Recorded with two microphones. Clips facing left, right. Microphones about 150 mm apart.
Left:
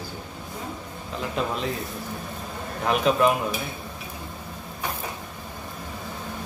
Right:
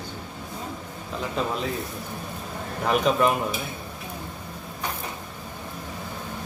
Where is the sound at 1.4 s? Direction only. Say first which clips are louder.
Even; centre (ahead or behind).